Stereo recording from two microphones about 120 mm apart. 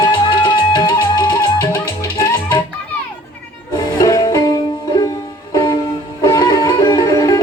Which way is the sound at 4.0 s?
30° left (ahead or behind).